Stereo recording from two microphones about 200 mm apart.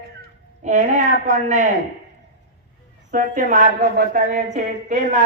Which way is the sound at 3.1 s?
40° right (ahead or behind).